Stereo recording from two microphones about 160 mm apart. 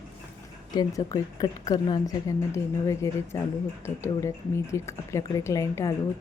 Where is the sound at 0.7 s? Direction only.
25° left (ahead or behind).